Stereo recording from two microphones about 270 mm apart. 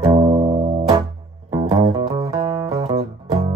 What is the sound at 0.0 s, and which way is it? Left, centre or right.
Music, centre.